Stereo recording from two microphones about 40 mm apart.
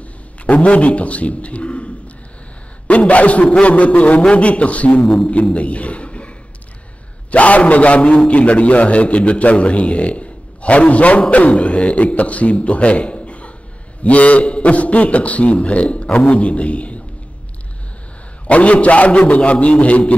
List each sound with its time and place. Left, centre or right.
0.5 s a man's voice: left
2.9 s a man's voice: left
18.5 s a man's voice: left